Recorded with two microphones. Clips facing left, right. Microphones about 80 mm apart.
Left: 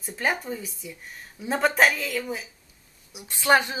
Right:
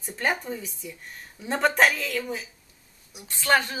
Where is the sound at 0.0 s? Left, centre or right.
Centre.